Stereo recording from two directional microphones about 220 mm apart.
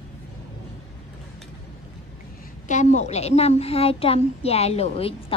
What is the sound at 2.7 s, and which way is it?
A child's voice, 30° left (ahead or behind).